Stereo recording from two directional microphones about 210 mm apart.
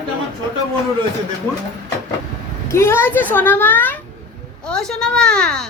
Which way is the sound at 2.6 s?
10° left (ahead or behind).